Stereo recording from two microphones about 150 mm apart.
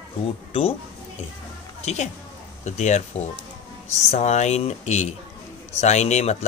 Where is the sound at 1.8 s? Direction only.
50° left (ahead or behind).